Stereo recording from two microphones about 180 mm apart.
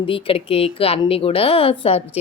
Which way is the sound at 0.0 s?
30° left (ahead or behind).